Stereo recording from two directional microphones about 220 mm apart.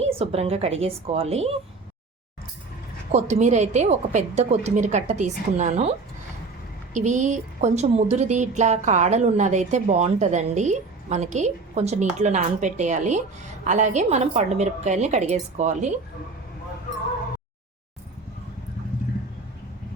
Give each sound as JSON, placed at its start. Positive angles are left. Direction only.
{"t": 0.0, "sound": "a woman's voice", "side_deg": -25}
{"t": 3.1, "sound": "a woman's voice", "side_deg": -30}
{"t": 6.9, "sound": "a woman's voice", "side_deg": -35}